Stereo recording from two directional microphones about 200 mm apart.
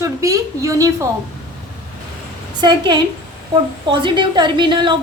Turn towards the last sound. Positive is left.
turn(degrees=-20)  # may be behind; listen again after turning